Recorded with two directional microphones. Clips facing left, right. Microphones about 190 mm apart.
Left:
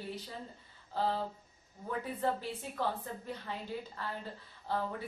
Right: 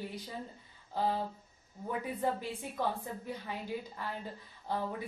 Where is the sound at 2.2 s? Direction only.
15° right (ahead or behind).